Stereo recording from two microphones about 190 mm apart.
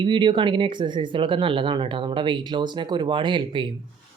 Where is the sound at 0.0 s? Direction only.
25° right (ahead or behind).